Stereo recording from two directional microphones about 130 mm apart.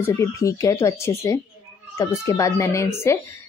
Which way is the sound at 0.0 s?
25° left (ahead or behind).